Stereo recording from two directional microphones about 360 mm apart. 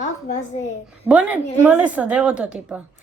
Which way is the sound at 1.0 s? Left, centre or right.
Centre.